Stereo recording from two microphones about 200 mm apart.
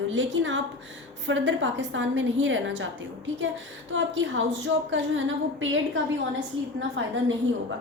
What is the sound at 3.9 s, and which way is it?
A woman's voice, 70° right (ahead or behind).